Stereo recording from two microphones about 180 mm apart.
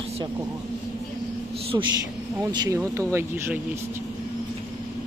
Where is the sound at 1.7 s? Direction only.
20° right (ahead or behind).